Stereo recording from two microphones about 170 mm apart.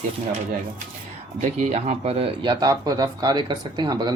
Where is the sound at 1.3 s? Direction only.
40° right (ahead or behind).